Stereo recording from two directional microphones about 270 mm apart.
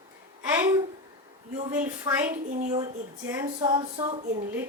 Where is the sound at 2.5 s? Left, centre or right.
Right.